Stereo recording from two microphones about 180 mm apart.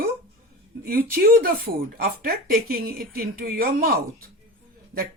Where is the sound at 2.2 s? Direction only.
60° right (ahead or behind).